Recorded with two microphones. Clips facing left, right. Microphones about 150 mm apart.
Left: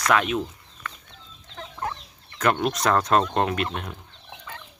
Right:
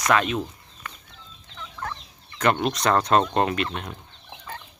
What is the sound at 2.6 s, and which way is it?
Speech, 5° left (ahead or behind).